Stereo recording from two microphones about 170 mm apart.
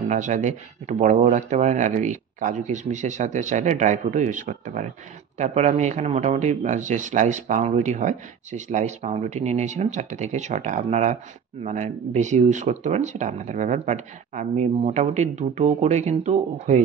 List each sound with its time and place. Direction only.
0.1 s speech: 45° right (ahead or behind)